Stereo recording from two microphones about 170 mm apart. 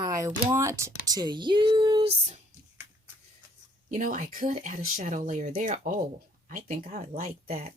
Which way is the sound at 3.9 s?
50° right (ahead or behind).